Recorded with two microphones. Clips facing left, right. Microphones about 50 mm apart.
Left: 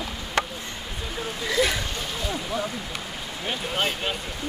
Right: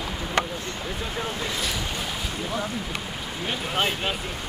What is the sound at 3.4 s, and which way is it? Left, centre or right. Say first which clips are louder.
Speech: right 1 dB; centre.